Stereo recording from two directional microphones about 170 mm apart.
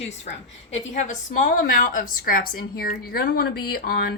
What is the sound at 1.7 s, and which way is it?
A woman's voice, 55° left (ahead or behind).